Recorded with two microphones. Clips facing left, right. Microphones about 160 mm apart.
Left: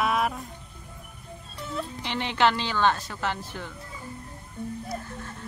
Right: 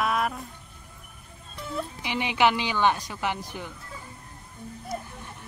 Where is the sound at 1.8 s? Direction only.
10° right (ahead or behind).